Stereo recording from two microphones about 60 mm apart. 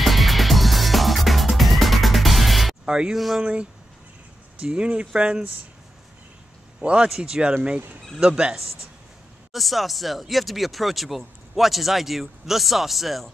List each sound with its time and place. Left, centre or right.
0.0 s music: centre
2.8 s speech: centre
4.6 s speech: centre
6.8 s a man's voice: centre
9.5 s speech: centre